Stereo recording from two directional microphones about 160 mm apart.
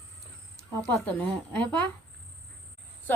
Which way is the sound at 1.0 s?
10° left (ahead or behind).